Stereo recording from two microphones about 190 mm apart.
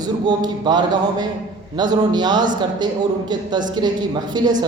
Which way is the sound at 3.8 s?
20° right (ahead or behind).